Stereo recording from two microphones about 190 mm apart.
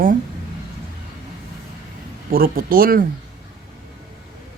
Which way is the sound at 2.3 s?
50° right (ahead or behind).